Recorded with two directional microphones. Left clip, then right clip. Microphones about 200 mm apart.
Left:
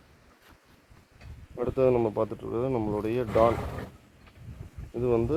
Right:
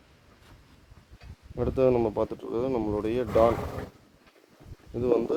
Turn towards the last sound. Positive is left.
turn(degrees=0)  # may be behind; listen again after turning